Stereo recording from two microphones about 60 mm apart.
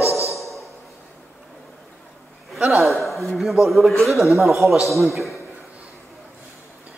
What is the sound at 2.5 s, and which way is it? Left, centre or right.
A man's voice, centre.